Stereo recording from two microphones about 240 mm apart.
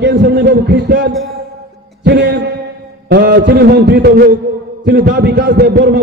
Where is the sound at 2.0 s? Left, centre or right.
Right.